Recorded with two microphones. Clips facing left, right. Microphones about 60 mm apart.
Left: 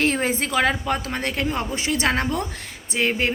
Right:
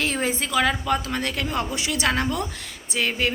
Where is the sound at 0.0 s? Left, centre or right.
Left.